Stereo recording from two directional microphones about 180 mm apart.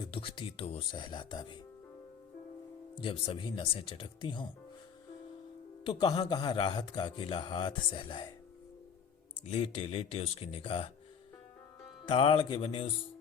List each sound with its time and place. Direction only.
0.0 s speech: 30° left (ahead or behind)
2.9 s speech: 30° left (ahead or behind)
5.8 s speech: 25° left (ahead or behind)
9.4 s speech: 35° left (ahead or behind)
12.0 s speech: 30° left (ahead or behind)